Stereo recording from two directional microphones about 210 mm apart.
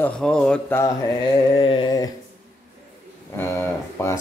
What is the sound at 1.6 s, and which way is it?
Mantra, 25° left (ahead or behind).